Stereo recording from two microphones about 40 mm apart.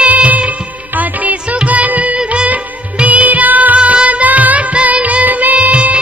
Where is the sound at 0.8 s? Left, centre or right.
Right.